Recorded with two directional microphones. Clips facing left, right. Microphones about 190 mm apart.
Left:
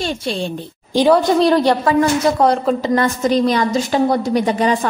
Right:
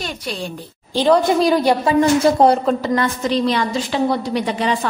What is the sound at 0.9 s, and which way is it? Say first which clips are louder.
Speech: left 2 dB; 15° left (ahead or behind).